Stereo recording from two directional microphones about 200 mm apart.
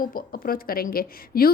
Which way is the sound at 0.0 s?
45° left (ahead or behind).